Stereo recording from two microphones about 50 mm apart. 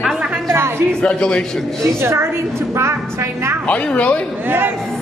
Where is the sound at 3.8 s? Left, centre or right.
Left.